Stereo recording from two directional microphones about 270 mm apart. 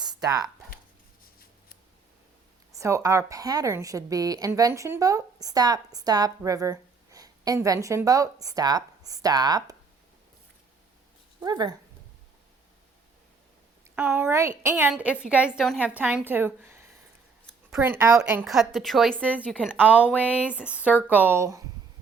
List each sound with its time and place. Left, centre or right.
0.0 s a sound: centre
1.2 s scissors: left
2.7 s a woman's voice: centre
11.3 s speech: centre
13.9 s a woman's voice: centre
21.1 s a woman's voice: centre